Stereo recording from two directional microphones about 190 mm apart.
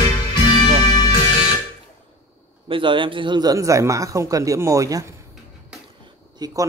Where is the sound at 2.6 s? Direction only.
25° right (ahead or behind).